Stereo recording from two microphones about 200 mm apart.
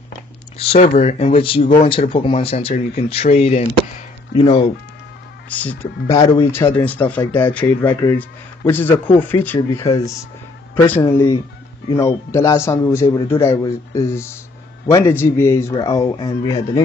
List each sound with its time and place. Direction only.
0.6 s speech: 30° left (ahead or behind)
5.5 s a man's voice: 10° left (ahead or behind)
6.8 s a man's voice: 5° left (ahead or behind)
10.9 s a man's voice: 10° left (ahead or behind); by 16.8 s 25° left (ahead or behind)